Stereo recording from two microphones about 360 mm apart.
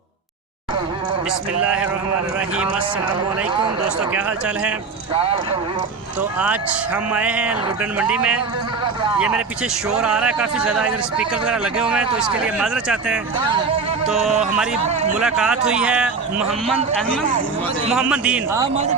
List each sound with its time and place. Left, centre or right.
1.6 s speech: centre
4.1 s speech: centre
5.1 s speech: centre
6.4 s speech: centre
14.8 s a man's voice: centre
15.2 s speech: centre
17.9 s speech: centre